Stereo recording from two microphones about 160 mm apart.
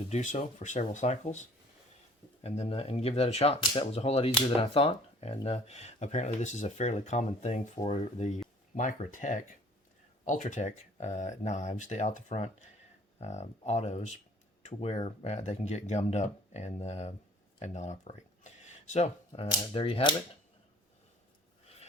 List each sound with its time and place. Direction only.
0.1 s speech: 50° left (ahead or behind)